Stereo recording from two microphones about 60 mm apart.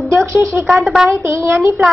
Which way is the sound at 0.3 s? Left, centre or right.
Right.